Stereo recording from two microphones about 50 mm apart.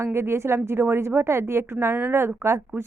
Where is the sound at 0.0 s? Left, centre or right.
Right.